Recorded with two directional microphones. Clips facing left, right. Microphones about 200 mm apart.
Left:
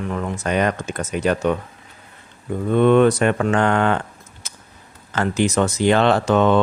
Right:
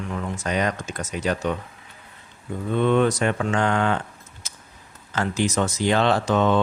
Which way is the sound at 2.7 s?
60° left (ahead or behind).